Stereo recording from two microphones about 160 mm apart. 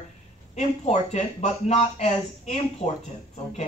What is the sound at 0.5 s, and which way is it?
A man's voice, 45° left (ahead or behind).